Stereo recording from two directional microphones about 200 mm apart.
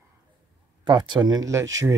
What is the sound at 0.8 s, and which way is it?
Speech, 20° right (ahead or behind).